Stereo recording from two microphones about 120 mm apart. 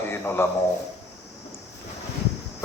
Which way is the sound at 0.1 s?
20° left (ahead or behind).